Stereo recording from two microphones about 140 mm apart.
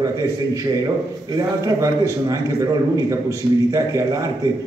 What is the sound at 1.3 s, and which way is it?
A man's voice, 25° right (ahead or behind).